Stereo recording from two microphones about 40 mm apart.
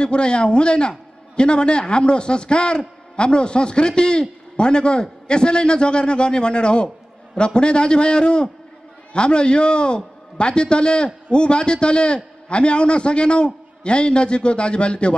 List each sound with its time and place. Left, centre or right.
0.0 s a man's voice: left